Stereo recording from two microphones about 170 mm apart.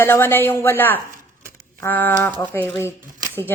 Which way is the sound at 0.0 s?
15° left (ahead or behind).